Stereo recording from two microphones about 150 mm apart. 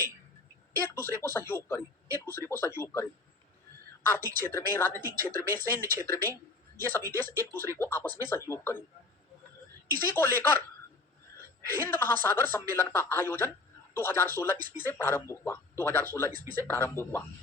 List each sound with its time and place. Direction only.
0.8 s speech: 15° left (ahead or behind)
4.4 s speech: 15° left (ahead or behind)
10.0 s speech: 15° left (ahead or behind)
11.7 s speech: 15° left (ahead or behind)